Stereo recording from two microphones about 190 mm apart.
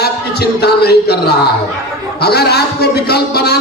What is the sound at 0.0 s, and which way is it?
A man's voice, 60° left (ahead or behind).